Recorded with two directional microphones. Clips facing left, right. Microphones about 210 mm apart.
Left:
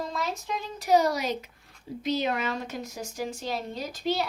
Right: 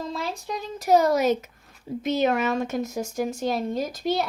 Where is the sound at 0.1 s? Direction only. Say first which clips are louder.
Right 1 dB; 35° right (ahead or behind).